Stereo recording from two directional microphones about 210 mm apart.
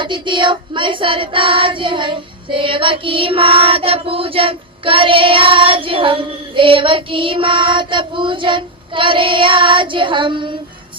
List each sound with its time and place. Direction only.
0.0 s child singing: 20° right (ahead or behind)